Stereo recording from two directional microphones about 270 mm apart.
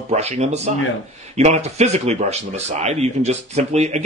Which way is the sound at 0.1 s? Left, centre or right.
Right.